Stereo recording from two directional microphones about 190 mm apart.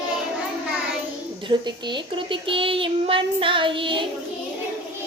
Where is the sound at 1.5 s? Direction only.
30° right (ahead or behind).